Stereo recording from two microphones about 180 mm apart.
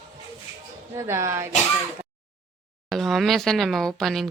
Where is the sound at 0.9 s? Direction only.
15° right (ahead or behind).